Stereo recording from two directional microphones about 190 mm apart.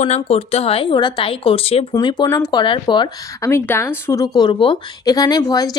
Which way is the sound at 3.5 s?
10° left (ahead or behind).